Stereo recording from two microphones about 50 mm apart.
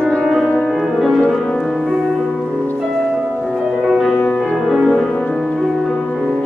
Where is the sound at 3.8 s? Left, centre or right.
Centre.